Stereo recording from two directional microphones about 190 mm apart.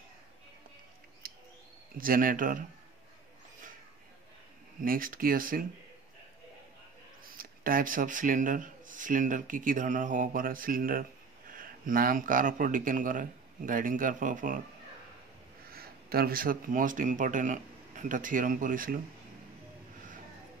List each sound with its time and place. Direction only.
1.2 s bird: 50° right (ahead or behind)
2.0 s speech: 45° right (ahead or behind)
4.8 s speech: 50° right (ahead or behind)
7.2 s speech: 50° right (ahead or behind)
15.7 s speech: 55° right (ahead or behind)